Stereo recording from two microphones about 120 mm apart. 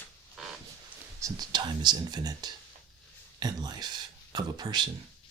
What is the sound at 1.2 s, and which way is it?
Speech, 30° right (ahead or behind).